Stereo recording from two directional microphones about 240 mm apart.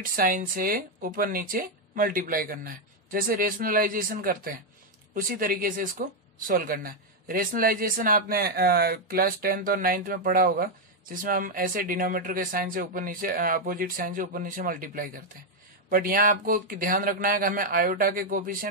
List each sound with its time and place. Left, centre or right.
0.1 s speech: right